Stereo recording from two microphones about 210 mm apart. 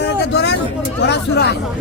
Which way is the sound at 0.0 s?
55° left (ahead or behind).